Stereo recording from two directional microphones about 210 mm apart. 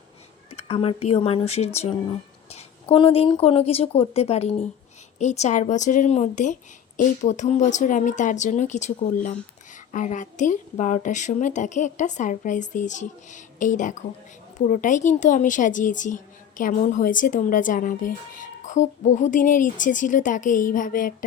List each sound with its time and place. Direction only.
0.5 s a woman's voice: 30° left (ahead or behind)